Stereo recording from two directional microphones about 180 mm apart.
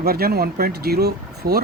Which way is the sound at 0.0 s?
60° right (ahead or behind).